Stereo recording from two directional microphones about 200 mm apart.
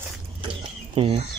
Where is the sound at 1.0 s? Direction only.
25° right (ahead or behind).